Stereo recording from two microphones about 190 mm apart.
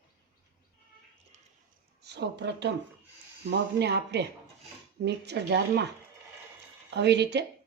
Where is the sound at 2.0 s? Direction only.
65° right (ahead or behind).